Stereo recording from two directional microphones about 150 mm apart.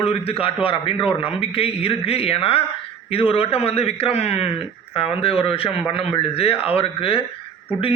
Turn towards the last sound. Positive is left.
turn(degrees=35)  # may be behind; listen again after turning